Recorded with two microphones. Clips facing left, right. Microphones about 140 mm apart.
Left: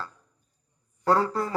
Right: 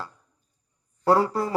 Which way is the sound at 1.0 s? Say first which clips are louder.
Right 3 dB; 25° right (ahead or behind).